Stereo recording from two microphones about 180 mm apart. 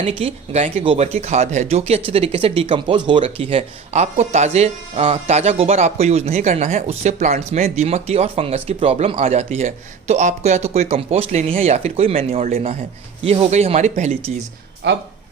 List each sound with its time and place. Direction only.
0.0 s speech: 35° right (ahead or behind)
14.8 s speech: 75° right (ahead or behind)